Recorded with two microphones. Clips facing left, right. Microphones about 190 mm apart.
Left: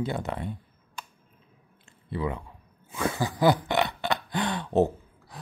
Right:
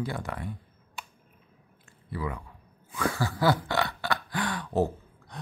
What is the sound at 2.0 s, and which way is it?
Speech, 25° left (ahead or behind).